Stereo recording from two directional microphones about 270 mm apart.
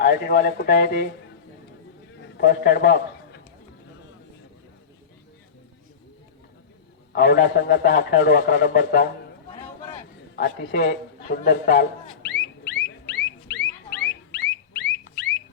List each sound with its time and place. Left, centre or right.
0.0 s a man's voice: left
2.4 s a man's voice: left
7.1 s a man's voice: left
10.3 s a sound: left